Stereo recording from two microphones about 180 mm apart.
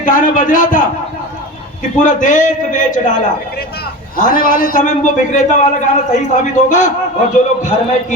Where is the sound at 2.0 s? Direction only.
45° left (ahead or behind).